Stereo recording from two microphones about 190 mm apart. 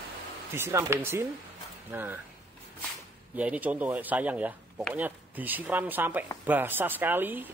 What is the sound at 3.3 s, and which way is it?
A man's voice, 10° right (ahead or behind).